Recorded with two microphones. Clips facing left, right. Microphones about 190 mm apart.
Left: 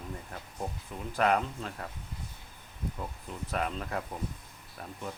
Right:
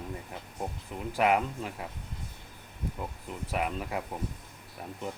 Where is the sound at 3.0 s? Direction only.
15° right (ahead or behind).